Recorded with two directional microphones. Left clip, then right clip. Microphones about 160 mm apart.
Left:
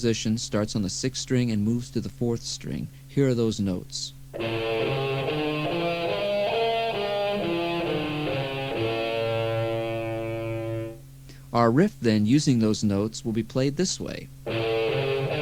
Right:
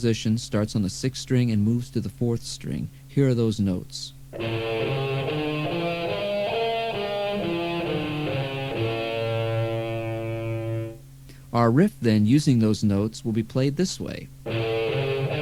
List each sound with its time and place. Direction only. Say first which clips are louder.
0.0 s speech: even; 25° right (ahead or behind)
4.4 s music: even; 25° right (ahead or behind)
11.5 s speech: even; 25° right (ahead or behind)